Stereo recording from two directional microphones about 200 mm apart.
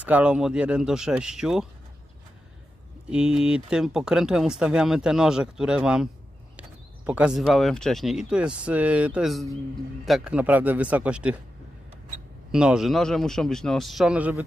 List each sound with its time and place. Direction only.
0.0 s speech: 5° right (ahead or behind)
3.1 s speech: 5° right (ahead or behind)
7.1 s speech: 5° right (ahead or behind)
12.4 s speech: 5° right (ahead or behind)